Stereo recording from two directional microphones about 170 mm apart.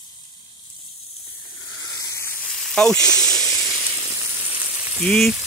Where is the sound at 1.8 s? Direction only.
20° left (ahead or behind); by 3.7 s centre (ahead or behind).